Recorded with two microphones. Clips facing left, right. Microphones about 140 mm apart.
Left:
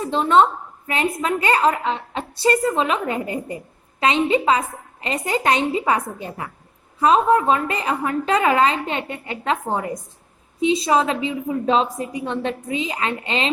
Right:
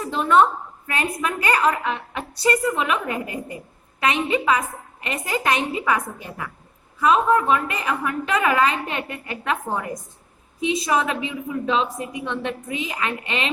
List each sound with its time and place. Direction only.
0.0 s a woman's voice: 25° left (ahead or behind)